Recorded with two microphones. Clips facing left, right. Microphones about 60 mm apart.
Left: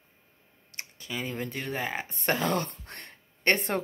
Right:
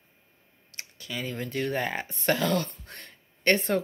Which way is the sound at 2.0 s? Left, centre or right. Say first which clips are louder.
Right 1 dB; left.